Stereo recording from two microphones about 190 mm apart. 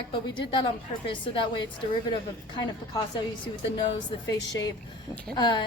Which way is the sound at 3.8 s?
20° left (ahead or behind).